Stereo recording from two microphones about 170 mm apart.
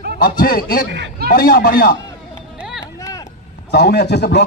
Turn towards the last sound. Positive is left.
turn(degrees=80)